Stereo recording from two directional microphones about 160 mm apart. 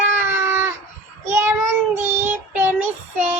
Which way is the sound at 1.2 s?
15° right (ahead or behind).